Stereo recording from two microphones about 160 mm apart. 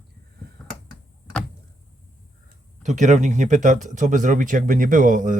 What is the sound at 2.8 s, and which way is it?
Speech, 50° right (ahead or behind).